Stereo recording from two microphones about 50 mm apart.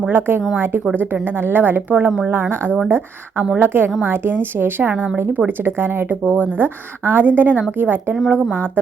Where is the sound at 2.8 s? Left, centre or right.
Right.